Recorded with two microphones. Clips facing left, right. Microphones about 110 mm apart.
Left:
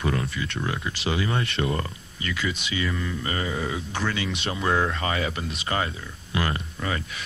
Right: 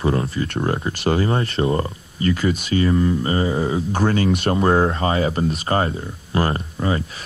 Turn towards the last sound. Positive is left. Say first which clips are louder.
# right 7 dB
turn(degrees=-30)  # may be behind; listen again after turning